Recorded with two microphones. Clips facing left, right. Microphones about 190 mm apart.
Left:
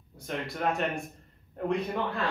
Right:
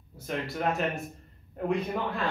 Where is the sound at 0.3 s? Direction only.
Centre (ahead or behind).